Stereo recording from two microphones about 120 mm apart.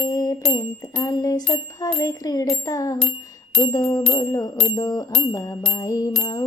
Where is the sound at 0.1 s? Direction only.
35° left (ahead or behind).